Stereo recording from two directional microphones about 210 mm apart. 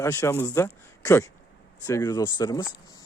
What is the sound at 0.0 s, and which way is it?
Speech, 15° left (ahead or behind).